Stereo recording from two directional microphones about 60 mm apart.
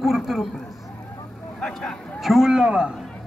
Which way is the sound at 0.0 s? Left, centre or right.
Centre.